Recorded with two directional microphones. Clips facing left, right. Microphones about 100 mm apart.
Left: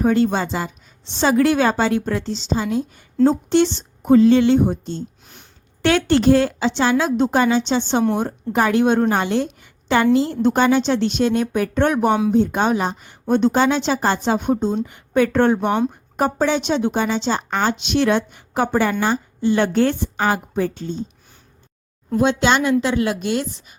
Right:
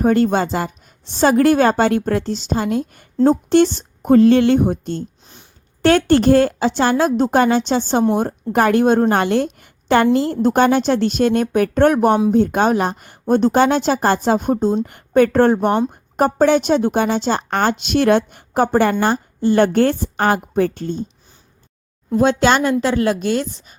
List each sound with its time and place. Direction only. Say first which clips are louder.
0.0 s a woman's voice: right 2 dB; 50° right (ahead or behind)
9.1 s a woman's voice: right 3 dB; 55° right (ahead or behind)
22.2 s a woman's voice: right 3 dB; 40° right (ahead or behind)